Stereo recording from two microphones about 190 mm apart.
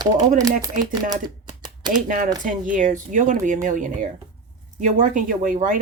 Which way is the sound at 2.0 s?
45° right (ahead or behind).